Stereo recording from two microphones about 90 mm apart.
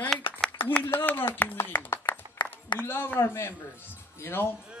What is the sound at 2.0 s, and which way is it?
Applause, 60° left (ahead or behind).